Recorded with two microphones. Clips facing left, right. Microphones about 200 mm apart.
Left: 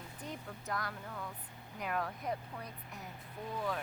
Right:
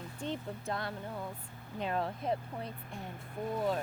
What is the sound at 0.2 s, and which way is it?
Speech, 25° right (ahead or behind).